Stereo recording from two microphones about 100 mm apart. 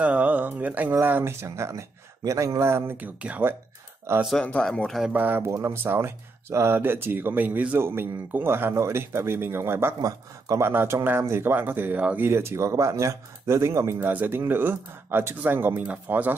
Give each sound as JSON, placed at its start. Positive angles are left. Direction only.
{"t": 0.0, "sound": "speech", "side_deg": -15}
{"t": 4.4, "sound": "speech", "side_deg": 10}
{"t": 5.1, "sound": "speech", "side_deg": -20}
{"t": 12.3, "sound": "speech", "side_deg": -25}